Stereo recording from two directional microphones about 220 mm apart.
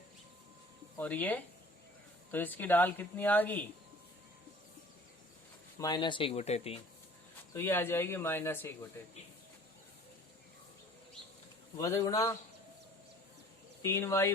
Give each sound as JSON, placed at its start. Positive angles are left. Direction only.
{"t": 0.9, "sound": "speech", "side_deg": 5}
{"t": 5.8, "sound": "speech", "side_deg": 20}
{"t": 7.5, "sound": "speech", "side_deg": 10}
{"t": 11.8, "sound": "speech", "side_deg": 15}
{"t": 13.8, "sound": "speech", "side_deg": 10}